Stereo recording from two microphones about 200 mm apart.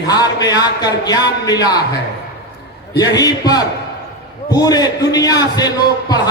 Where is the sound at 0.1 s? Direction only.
20° left (ahead or behind).